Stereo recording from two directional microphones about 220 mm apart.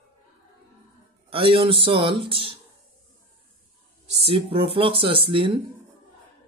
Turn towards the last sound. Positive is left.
turn(degrees=-20)  # may be behind; listen again after turning